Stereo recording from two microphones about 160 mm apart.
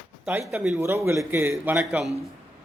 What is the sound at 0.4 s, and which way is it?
Speech, 5° right (ahead or behind).